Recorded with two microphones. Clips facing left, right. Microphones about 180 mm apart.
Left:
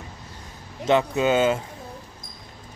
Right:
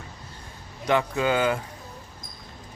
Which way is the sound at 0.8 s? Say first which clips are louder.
Left 3 dB; 20° left (ahead or behind).